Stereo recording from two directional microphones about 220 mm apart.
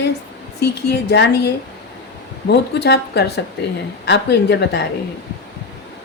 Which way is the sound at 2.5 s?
50° left (ahead or behind).